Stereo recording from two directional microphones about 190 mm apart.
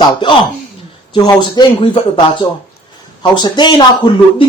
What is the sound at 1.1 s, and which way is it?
Speech, 25° left (ahead or behind).